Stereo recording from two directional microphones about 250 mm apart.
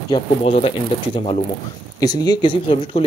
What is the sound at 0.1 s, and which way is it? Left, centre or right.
Speech, left.